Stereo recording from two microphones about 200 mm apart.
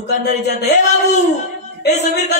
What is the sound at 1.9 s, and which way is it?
Speech, 35° left (ahead or behind).